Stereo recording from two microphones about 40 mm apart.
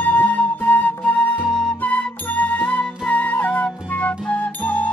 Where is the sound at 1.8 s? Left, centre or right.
Left.